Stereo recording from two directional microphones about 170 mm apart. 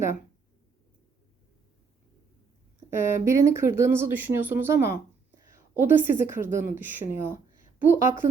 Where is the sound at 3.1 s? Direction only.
15° right (ahead or behind).